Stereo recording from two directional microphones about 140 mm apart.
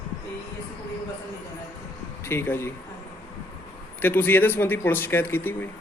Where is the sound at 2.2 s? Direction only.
15° left (ahead or behind).